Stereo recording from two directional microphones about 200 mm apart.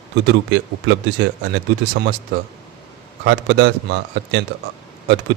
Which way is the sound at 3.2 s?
60° right (ahead or behind).